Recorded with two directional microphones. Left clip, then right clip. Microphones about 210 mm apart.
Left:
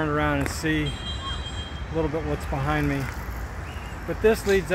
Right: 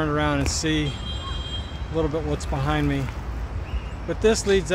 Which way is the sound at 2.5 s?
15° right (ahead or behind).